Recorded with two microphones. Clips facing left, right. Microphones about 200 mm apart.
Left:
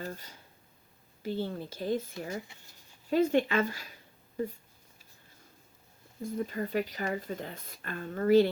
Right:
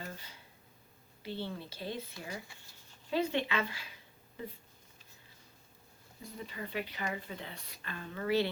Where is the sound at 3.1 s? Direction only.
45° left (ahead or behind).